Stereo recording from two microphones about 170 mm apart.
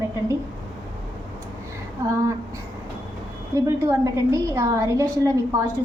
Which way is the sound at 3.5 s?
20° right (ahead or behind).